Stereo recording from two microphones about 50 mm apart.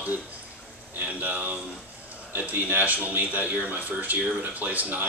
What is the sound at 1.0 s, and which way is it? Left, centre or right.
A man's voice, right.